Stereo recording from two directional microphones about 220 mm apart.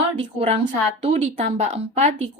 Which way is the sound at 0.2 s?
30° right (ahead or behind).